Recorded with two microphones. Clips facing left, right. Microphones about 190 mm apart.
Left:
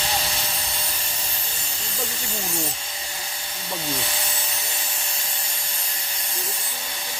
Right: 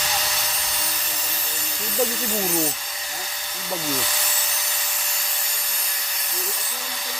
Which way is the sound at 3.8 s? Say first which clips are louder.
Right 1 dB; 25° left (ahead or behind).